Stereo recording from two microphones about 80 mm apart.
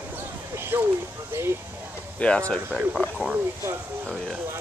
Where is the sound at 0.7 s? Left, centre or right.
Right.